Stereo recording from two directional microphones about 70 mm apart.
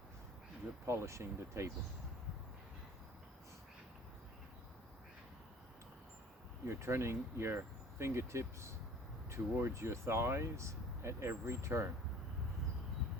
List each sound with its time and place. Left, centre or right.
0.9 s speech: right
6.7 s speech: right